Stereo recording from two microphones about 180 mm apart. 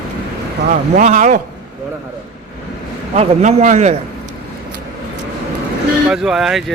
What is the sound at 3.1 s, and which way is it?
Speech, 40° right (ahead or behind).